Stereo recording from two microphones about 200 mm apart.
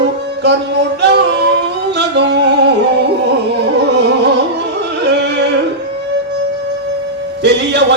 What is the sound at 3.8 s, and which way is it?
Music, 60° right (ahead or behind).